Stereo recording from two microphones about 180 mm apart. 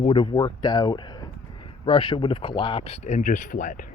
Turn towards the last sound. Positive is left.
turn(degrees=45)  # may be behind; listen again after turning